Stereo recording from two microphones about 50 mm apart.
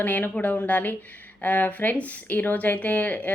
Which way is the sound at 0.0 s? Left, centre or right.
Left.